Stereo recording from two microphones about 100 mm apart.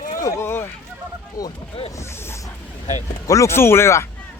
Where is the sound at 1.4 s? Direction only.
35° left (ahead or behind).